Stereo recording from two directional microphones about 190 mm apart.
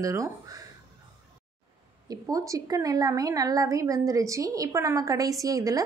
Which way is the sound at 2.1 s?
20° right (ahead or behind).